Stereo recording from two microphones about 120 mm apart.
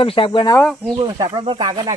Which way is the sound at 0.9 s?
35° right (ahead or behind).